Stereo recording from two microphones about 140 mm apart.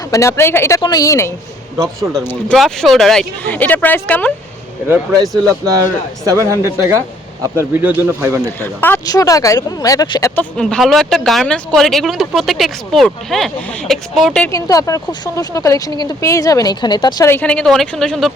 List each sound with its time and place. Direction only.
0.1 s speech: 20° left (ahead or behind)
1.7 s speech: 25° right (ahead or behind)
2.6 s speech: centre (ahead or behind)
6.2 s speech: 20° right (ahead or behind)
8.4 s speech: 15° left (ahead or behind)
10.3 s speech: 5° left (ahead or behind)
14.5 s speech: 25° left (ahead or behind)
17.2 s speech: 10° left (ahead or behind)